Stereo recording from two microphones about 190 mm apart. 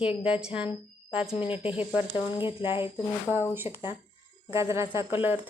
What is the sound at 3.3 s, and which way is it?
A woman's voice, 10° right (ahead or behind).